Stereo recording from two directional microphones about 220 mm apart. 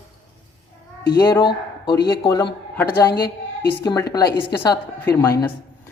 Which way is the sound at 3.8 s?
15° left (ahead or behind).